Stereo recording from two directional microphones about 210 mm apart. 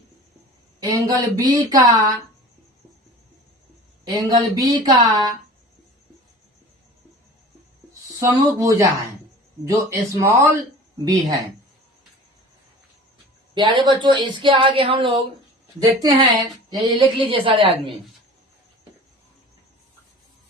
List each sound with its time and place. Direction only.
0.8 s speech: 20° right (ahead or behind)
4.3 s speech: 20° right (ahead or behind)
8.2 s speech: 15° right (ahead or behind)
13.5 s speech: 20° right (ahead or behind)